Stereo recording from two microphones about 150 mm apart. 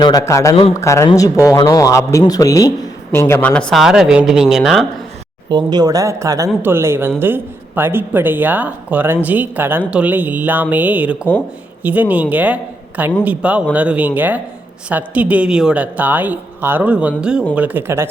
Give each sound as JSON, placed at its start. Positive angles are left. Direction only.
{"t": 0.0, "sound": "speech", "side_deg": 25}
{"t": 5.5, "sound": "speech", "side_deg": -30}